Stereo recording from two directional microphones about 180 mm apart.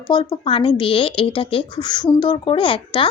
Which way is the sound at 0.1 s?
25° left (ahead or behind).